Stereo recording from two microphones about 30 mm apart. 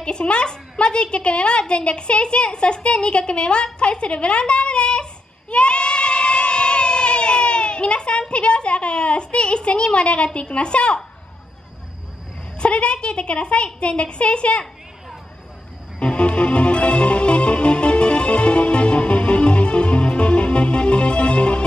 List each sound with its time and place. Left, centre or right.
0.0 s a child's voice: left
5.5 s goat: left
12.6 s a child's voice: left
16.0 s music: left